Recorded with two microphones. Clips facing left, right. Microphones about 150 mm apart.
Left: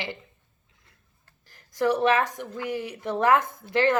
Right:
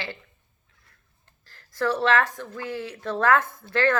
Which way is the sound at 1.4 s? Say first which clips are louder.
Left 2 dB; 15° left (ahead or behind).